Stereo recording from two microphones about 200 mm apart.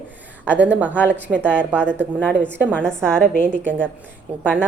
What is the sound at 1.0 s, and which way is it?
Speech, 5° left (ahead or behind).